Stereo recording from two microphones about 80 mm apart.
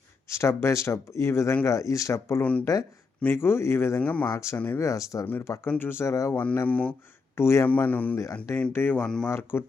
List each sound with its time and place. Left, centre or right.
0.3 s speech: left
2.4 s speech: centre
3.3 s speech: left
4.0 s speech: centre
4.3 s speech: left
5.2 s speech: left
5.9 s speech: left
6.3 s speech: left
7.3 s speech: left
7.7 s speech: left